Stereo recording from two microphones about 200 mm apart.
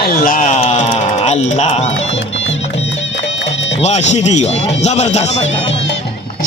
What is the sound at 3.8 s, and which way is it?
A man's voice, 35° left (ahead or behind).